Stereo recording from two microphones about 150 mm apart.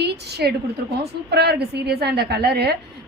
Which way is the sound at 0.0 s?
90° right.